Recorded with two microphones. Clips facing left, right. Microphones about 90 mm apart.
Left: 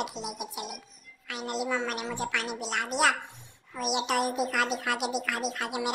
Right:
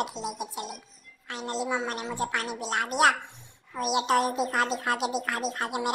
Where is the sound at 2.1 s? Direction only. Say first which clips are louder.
Right 5 dB; 35° right (ahead or behind).